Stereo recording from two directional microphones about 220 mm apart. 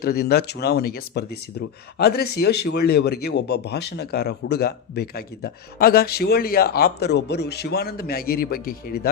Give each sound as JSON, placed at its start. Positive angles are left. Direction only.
{"t": 0.0, "sound": "a man's voice", "side_deg": 45}